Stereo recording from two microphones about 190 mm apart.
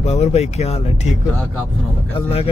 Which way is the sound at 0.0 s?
35° left (ahead or behind).